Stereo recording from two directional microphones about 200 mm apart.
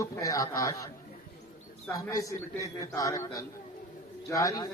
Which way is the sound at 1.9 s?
15° left (ahead or behind).